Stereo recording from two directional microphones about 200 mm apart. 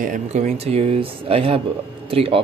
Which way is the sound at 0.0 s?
40° right (ahead or behind).